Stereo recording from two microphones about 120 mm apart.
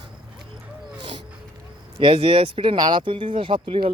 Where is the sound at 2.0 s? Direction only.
45° right (ahead or behind).